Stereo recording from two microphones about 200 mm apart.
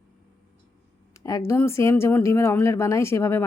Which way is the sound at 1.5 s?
15° left (ahead or behind).